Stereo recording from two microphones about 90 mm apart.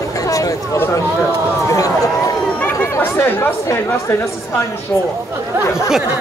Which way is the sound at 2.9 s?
25° left (ahead or behind).